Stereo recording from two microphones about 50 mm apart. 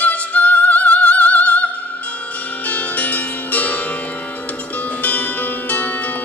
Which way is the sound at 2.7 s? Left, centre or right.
Left.